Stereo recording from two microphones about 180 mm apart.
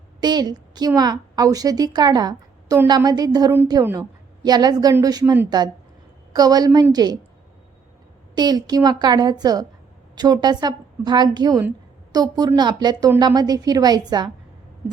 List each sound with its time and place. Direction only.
0.2 s a woman's voice: 25° right (ahead or behind)
8.4 s a woman's voice: 25° right (ahead or behind)